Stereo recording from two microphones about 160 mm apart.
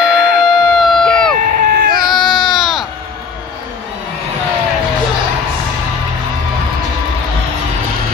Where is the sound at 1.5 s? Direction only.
65° right (ahead or behind).